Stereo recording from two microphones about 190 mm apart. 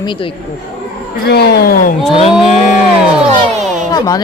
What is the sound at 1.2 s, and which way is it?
Speech, 60° left (ahead or behind).